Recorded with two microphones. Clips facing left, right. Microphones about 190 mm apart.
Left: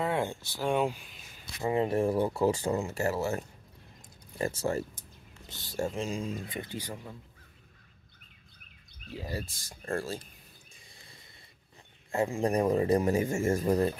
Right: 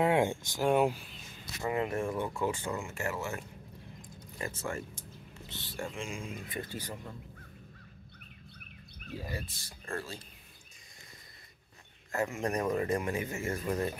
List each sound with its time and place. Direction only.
0.0 s speech: 15° right (ahead or behind)
1.4 s speech: 25° left (ahead or behind)
9.3 s speech: 45° left (ahead or behind)
12.1 s speech: 30° left (ahead or behind)